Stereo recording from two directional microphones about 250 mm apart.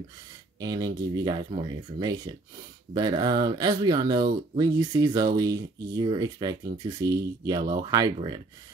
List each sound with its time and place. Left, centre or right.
0.6 s speech: centre